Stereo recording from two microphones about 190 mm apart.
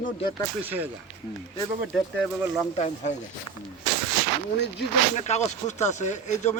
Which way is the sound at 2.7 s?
35° left (ahead or behind).